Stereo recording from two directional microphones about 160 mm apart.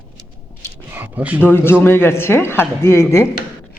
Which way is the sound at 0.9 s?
10° right (ahead or behind).